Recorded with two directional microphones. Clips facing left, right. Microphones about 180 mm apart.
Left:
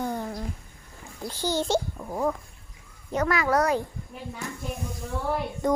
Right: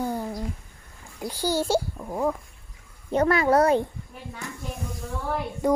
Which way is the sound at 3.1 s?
30° right (ahead or behind).